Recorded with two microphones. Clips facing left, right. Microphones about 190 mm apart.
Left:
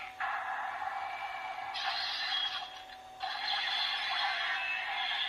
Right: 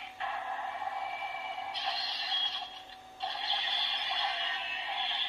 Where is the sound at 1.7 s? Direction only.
25° right (ahead or behind).